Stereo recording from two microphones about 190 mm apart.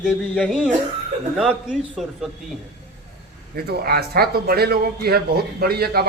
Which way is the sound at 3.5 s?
55° right (ahead or behind).